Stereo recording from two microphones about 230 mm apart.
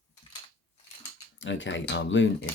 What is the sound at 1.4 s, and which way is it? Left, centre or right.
Speech, left.